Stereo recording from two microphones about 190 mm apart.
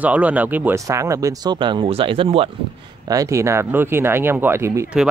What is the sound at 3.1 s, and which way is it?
Speech, 15° right (ahead or behind).